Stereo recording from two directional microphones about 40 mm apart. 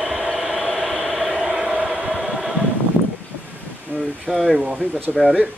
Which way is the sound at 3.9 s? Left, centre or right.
Right.